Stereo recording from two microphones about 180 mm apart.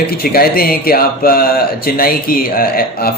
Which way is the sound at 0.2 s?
55° left (ahead or behind).